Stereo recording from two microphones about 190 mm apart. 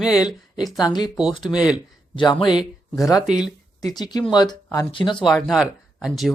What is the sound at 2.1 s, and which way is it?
Speech, 25° left (ahead or behind).